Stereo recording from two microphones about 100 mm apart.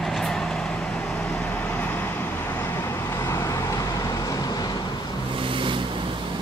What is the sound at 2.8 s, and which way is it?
Vehicle, 25° left (ahead or behind).